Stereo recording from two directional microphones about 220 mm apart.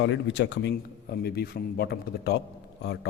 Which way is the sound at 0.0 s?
55° left (ahead or behind).